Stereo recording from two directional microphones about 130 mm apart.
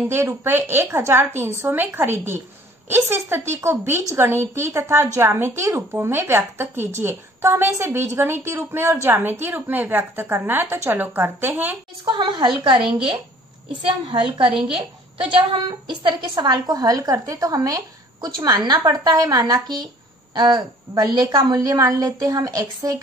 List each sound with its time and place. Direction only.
0.1 s a woman's voice: 20° right (ahead or behind)
12.0 s a woman's voice: 35° right (ahead or behind)